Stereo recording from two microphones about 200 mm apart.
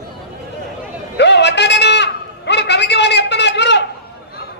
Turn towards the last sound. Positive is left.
turn(degrees=60)  # may be behind; listen again after turning